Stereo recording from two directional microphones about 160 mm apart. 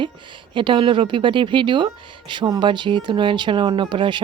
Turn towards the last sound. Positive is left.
turn(degrees=-30)  # may be behind; listen again after turning